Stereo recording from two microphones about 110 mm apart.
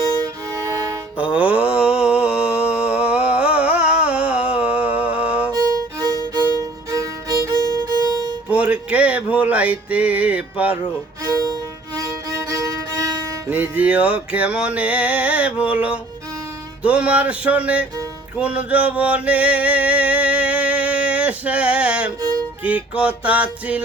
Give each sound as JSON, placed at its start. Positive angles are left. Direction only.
{"t": 1.1, "sound": "mantra", "side_deg": -10}
{"t": 5.5, "sound": "violin", "side_deg": -35}
{"t": 8.4, "sound": "music", "side_deg": -10}
{"t": 13.5, "sound": "music", "side_deg": -15}
{"t": 18.3, "sound": "male singing", "side_deg": -10}
{"t": 22.2, "sound": "music", "side_deg": -35}
{"t": 22.6, "sound": "music", "side_deg": -10}